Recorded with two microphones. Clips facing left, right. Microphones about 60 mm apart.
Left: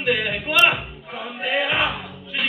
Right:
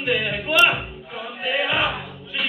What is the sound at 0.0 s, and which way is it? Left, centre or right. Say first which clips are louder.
Speech: left 1 dB; left.